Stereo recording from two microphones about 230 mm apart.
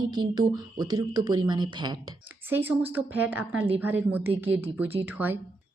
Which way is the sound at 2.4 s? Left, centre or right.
Centre.